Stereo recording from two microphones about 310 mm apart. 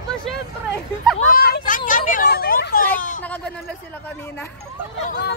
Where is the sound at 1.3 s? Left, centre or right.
Left.